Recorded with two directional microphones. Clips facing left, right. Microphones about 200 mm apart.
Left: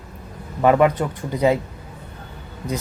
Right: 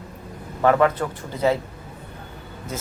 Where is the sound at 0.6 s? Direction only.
15° left (ahead or behind).